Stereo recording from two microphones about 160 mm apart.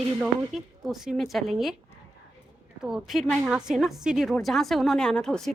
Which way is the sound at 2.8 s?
5° right (ahead or behind).